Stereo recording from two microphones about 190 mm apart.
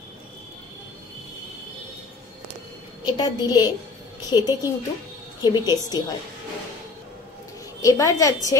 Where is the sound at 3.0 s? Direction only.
20° left (ahead or behind).